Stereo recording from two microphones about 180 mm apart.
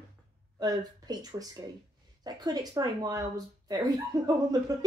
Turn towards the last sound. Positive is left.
turn(degrees=-20)  # may be behind; listen again after turning